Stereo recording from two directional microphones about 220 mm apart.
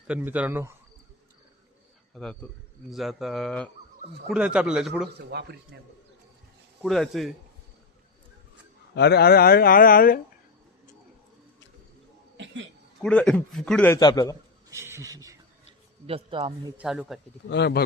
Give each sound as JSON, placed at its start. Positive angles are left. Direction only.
{"t": 0.1, "sound": "speech", "side_deg": -10}
{"t": 2.1, "sound": "a man's voice", "side_deg": 5}
{"t": 5.1, "sound": "a man's voice", "side_deg": -50}
{"t": 6.8, "sound": "a man's voice", "side_deg": 0}
{"t": 9.0, "sound": "speech", "side_deg": 50}
{"t": 13.0, "sound": "a man's voice", "side_deg": 5}
{"t": 14.8, "sound": "speech", "side_deg": -10}
{"t": 16.0, "sound": "a man's voice", "side_deg": -25}
{"t": 16.7, "sound": "a man's voice", "side_deg": -5}
{"t": 17.5, "sound": "speech", "side_deg": 50}